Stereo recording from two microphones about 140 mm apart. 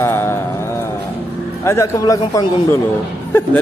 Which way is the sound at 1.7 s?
20° left (ahead or behind).